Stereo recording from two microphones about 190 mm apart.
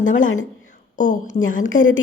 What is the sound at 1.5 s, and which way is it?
Speech, 90° left.